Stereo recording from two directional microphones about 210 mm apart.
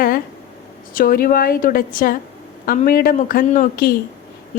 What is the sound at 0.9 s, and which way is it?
A woman's voice, 45° left (ahead or behind).